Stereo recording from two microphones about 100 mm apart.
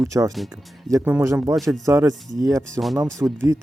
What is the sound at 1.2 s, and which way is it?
Speech, 30° right (ahead or behind).